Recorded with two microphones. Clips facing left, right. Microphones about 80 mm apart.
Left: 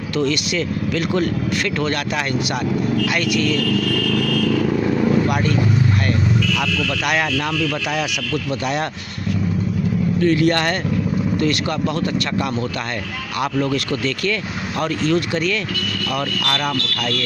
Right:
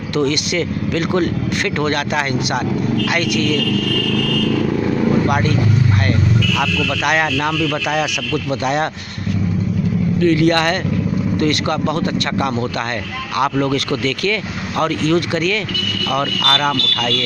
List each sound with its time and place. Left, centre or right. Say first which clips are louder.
1.8 s speech: right 3 dB; right
4.6 s vehicle: right 1 dB; centre
6.5 s speech: right 3 dB; right
13.4 s speech: right 3 dB; right
16.3 s speech: right 4 dB; right